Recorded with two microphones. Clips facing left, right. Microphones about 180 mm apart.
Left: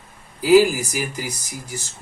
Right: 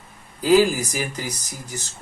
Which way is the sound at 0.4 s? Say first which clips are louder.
Left 2 dB; 10° left (ahead or behind).